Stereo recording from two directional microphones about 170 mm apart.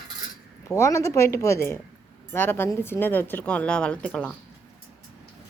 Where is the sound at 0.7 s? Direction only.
15° left (ahead or behind).